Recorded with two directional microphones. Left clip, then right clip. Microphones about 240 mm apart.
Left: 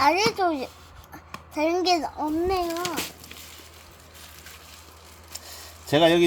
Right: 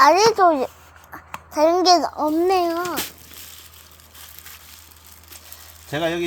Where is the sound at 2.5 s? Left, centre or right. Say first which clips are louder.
Right 7 dB; right.